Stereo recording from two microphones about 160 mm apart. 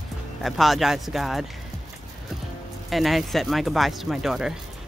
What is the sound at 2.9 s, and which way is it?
Speech, centre (ahead or behind).